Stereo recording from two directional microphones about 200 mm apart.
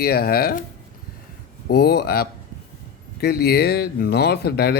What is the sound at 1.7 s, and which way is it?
Speech, 50° left (ahead or behind).